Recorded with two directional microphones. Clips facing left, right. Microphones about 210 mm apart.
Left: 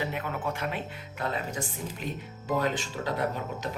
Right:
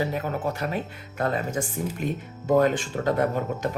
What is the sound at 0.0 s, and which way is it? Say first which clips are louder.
Speech: right 5 dB; 40° right (ahead or behind).